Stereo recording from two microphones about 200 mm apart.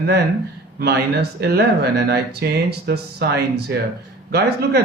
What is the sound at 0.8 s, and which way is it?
Speech, 55° right (ahead or behind).